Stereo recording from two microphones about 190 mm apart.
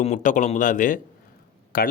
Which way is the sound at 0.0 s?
40° left (ahead or behind).